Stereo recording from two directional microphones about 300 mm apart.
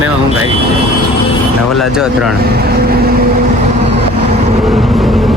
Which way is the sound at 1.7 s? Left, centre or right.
Centre.